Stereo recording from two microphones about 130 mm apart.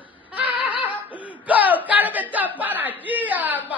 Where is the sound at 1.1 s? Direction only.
40° left (ahead or behind).